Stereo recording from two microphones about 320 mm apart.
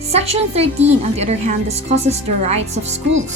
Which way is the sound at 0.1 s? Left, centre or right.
Centre.